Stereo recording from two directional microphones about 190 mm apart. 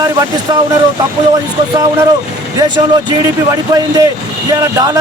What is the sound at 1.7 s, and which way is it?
Speech, 20° right (ahead or behind).